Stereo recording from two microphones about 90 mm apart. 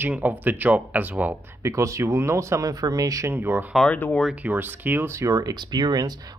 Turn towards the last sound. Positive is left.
turn(degrees=-50)  # may be behind; listen again after turning